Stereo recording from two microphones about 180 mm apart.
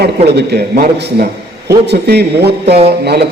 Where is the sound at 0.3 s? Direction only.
60° right (ahead or behind).